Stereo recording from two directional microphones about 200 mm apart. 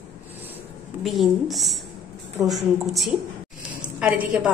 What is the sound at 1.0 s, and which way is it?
Speech, centre (ahead or behind).